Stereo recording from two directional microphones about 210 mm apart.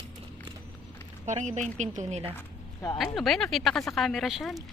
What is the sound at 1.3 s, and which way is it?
A woman's voice, 35° right (ahead or behind).